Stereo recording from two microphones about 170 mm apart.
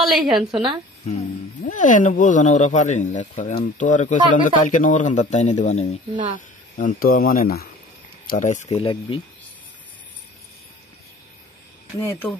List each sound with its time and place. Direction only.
0.0 s a woman's voice: centre (ahead or behind)
1.0 s speech: 45° left (ahead or behind)
6.8 s speech: 50° left (ahead or behind)
8.3 s speech: 50° left (ahead or behind)
12.0 s speech: 15° left (ahead or behind)